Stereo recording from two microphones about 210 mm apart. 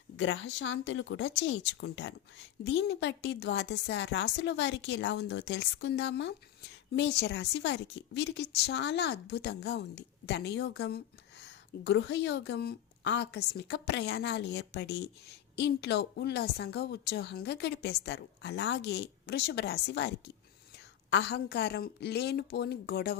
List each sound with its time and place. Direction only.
0.2 s a woman's voice: 65° left (ahead or behind); by 23.1 s 45° left (ahead or behind)